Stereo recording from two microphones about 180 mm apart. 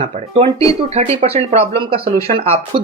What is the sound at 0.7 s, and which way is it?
Speech, 35° right (ahead or behind).